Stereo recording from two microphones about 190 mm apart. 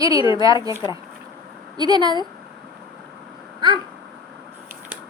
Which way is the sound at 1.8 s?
20° right (ahead or behind).